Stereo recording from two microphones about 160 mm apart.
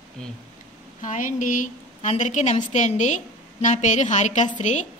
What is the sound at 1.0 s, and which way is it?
A woman's voice, 55° left (ahead or behind).